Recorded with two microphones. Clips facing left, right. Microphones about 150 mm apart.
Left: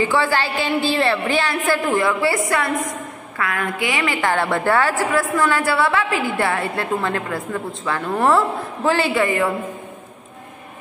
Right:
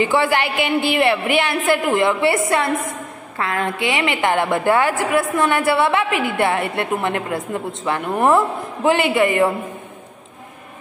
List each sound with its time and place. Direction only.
0.0 s a woman's voice: 20° right (ahead or behind)